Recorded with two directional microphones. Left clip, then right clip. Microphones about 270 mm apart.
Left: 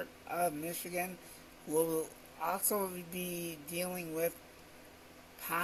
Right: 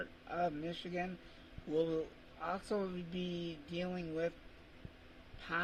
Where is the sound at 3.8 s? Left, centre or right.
Centre.